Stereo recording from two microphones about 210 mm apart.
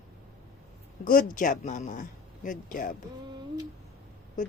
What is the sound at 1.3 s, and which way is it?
Speech, 40° left (ahead or behind).